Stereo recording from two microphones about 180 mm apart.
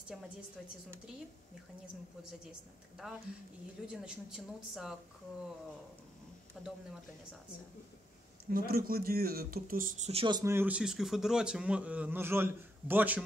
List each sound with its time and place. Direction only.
3.8 s speech: 5° right (ahead or behind)
6.6 s speech: centre (ahead or behind)
8.5 s speech: 55° right (ahead or behind); by 10.2 s 40° right (ahead or behind)
10.2 s speech: 20° right (ahead or behind)